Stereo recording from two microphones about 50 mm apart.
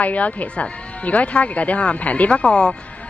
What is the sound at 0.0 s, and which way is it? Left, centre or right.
Speech, left.